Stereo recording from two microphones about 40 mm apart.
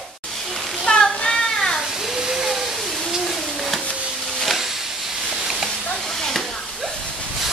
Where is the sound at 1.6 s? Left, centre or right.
Centre.